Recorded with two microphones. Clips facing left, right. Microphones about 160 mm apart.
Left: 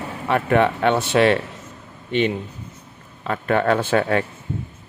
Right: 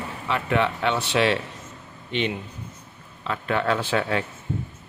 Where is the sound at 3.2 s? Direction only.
50° left (ahead or behind).